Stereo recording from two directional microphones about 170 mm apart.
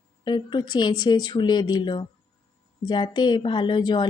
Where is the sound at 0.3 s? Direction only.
25° left (ahead or behind).